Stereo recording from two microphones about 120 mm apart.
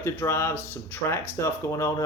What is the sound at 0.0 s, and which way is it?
Speech, 20° left (ahead or behind).